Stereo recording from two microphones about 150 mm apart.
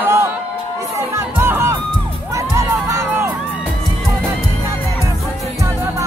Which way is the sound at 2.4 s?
20° right (ahead or behind).